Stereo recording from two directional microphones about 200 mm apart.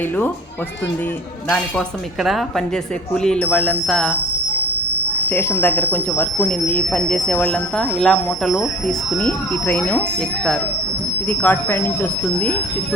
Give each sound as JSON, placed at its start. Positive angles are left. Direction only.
{"t": 2.2, "sound": "a sound", "side_deg": 0}
{"t": 5.2, "sound": "speech", "side_deg": 10}
{"t": 11.3, "sound": "speech", "side_deg": 10}